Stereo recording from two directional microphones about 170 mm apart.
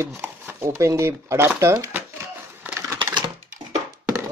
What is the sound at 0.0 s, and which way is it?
Speech, 15° right (ahead or behind).